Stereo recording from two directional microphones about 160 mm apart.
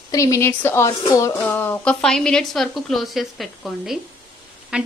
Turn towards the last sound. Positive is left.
turn(degrees=-5)  # may be behind; listen again after turning